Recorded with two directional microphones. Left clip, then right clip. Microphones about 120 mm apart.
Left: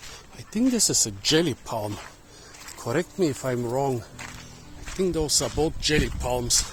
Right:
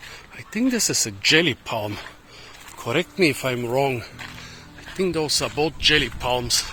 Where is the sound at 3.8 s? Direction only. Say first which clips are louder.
Right 6 dB; 10° right (ahead or behind).